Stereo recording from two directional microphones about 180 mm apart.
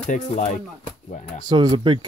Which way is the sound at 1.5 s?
25° right (ahead or behind).